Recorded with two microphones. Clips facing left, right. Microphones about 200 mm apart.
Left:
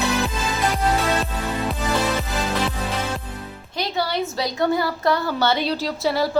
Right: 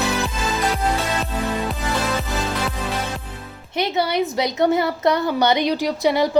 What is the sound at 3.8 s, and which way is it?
A woman's voice, 20° right (ahead or behind).